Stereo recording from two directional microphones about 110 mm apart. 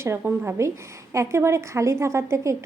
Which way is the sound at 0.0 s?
20° right (ahead or behind).